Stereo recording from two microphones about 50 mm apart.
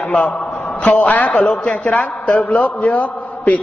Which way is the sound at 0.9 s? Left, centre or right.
Left.